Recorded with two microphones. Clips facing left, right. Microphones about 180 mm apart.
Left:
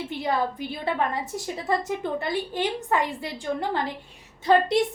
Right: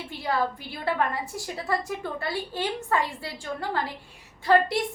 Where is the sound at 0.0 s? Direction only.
20° left (ahead or behind).